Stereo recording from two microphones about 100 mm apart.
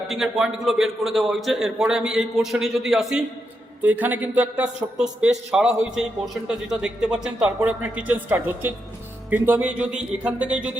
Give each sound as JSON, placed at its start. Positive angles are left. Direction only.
{"t": 0.1, "sound": "a man's voice", "side_deg": -5}
{"t": 3.8, "sound": "a man's voice", "side_deg": -15}